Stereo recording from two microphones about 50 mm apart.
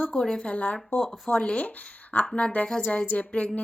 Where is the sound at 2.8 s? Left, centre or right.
Left.